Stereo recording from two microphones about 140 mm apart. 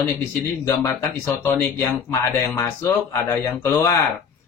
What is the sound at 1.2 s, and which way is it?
Speech, 15° left (ahead or behind).